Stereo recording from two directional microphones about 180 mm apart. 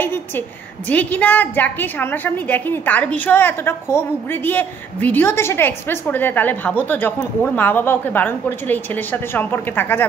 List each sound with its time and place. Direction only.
0.8 s a woman's voice: 10° left (ahead or behind)